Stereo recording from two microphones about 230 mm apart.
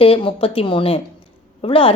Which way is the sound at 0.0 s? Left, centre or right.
Left.